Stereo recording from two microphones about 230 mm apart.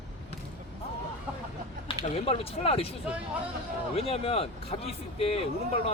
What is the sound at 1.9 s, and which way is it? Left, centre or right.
Speech, left.